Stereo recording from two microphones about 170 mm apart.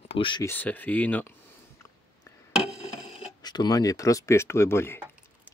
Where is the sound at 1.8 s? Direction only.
20° left (ahead or behind).